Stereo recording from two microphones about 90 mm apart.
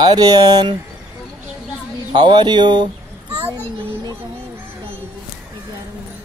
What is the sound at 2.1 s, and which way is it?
Speech, 55° right (ahead or behind).